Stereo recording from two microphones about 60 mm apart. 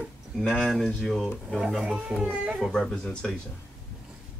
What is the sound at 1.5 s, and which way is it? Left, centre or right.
Speech, centre.